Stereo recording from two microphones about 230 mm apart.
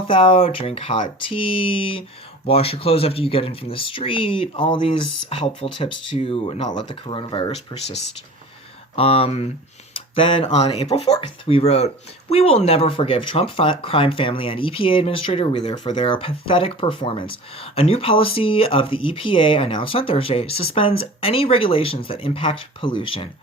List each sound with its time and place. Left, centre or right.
0.1 s speech: left